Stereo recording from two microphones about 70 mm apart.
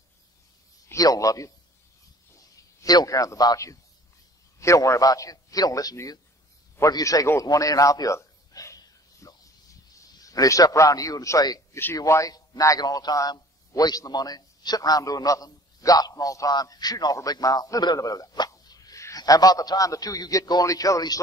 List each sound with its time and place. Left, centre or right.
0.9 s a man's voice: left
2.3 s a sound: left
3.5 s a man's voice: left
8.7 s a sound: left
12.1 s a man's voice: left
18.6 s plop: left
19.1 s a man's voice: left